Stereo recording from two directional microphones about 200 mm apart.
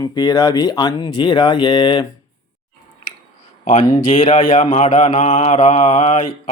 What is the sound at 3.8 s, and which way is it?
Speech, 20° left (ahead or behind).